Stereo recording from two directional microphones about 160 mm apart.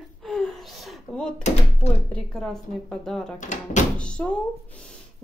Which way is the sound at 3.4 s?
50° left (ahead or behind).